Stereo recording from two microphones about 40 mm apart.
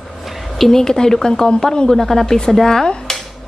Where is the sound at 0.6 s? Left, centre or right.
Centre.